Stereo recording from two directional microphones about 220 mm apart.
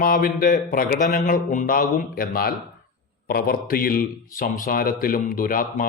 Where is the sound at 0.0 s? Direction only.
40° left (ahead or behind).